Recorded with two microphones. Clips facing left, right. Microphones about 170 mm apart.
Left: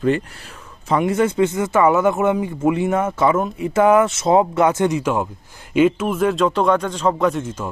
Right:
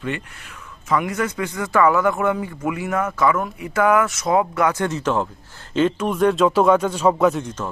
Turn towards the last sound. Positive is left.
turn(degrees=0)  # may be behind; listen again after turning